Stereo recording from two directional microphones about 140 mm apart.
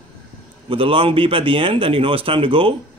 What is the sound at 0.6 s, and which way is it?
Speech, 40° right (ahead or behind).